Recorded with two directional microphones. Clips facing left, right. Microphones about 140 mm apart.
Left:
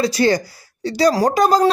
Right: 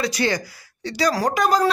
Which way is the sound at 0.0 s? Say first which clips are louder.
Left 6 dB; 35° left (ahead or behind).